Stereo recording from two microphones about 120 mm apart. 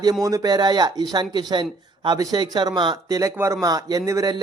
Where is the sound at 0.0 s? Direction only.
30° right (ahead or behind).